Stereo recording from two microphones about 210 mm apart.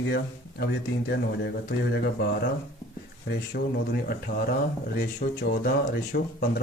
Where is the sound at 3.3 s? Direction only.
50° left (ahead or behind).